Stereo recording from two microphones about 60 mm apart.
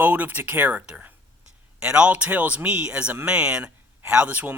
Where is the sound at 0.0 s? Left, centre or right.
Right.